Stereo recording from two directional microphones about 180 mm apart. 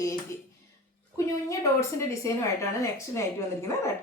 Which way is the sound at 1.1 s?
15° left (ahead or behind).